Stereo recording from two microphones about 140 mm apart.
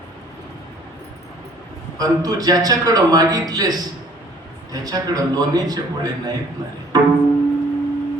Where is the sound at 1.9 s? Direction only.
25° right (ahead or behind).